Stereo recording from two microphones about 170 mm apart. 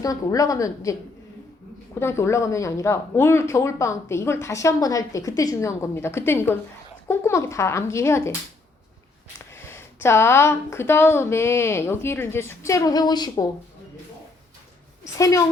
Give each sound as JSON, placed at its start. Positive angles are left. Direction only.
{"t": 0.0, "sound": "a woman's voice", "side_deg": 20}
{"t": 2.0, "sound": "speech", "side_deg": 15}
{"t": 9.6, "sound": "speech", "side_deg": 15}